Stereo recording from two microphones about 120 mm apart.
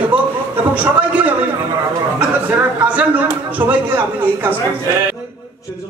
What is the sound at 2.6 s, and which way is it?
Speech, 15° right (ahead or behind).